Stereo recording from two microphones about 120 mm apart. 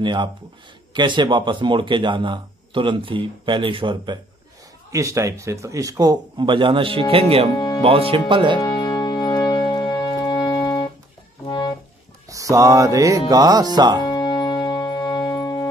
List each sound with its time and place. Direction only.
0.0 s speech: 40° right (ahead or behind)
4.9 s speech: 25° right (ahead or behind); by 7.4 s 50° right (ahead or behind)
7.5 s music: 35° left (ahead or behind)
7.8 s speech: 50° right (ahead or behind)
8.5 s music: 35° left (ahead or behind)
12.3 s music: 25° right (ahead or behind)
13.3 s speech: 30° right (ahead or behind)
14.0 s music: 35° left (ahead or behind)